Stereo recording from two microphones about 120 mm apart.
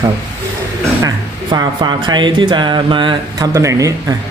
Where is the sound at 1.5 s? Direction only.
35° right (ahead or behind).